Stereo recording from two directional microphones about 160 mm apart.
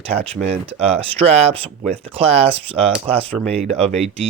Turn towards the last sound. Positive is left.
turn(degrees=-40)  # may be behind; listen again after turning